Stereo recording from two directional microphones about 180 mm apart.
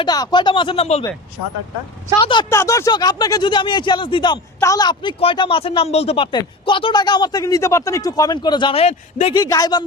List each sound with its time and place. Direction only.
0.0 s speech: 25° left (ahead or behind)
2.1 s speech: 25° left (ahead or behind)
9.3 s speech: 20° left (ahead or behind)